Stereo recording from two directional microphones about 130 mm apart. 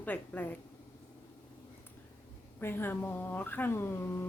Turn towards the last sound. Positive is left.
turn(degrees=20)  # may be behind; listen again after turning